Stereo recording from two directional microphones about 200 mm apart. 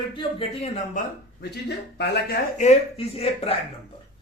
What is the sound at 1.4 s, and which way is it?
Speech, 55° left (ahead or behind).